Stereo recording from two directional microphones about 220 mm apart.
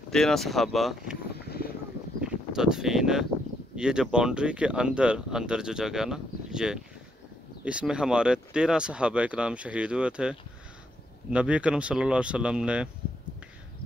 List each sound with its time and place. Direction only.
0.1 s speech: centre (ahead or behind)
2.1 s speech: 5° right (ahead or behind)